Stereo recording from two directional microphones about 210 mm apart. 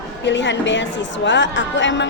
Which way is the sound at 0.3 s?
60° left (ahead or behind).